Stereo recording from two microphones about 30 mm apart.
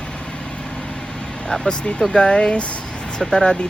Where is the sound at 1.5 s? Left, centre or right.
Left.